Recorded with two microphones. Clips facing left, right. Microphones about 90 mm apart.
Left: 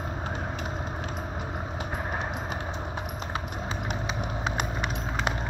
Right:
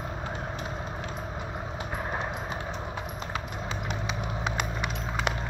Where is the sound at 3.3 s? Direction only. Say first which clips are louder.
Left 1 dB; 45° left (ahead or behind).